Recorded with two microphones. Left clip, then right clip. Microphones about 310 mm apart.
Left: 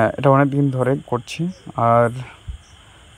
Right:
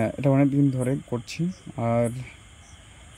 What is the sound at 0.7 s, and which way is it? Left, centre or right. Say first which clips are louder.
Speech: left 8 dB; left.